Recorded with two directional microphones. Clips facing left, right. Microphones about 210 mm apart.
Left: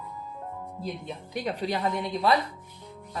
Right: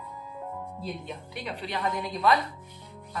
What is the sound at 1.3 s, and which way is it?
Speech, 40° left (ahead or behind).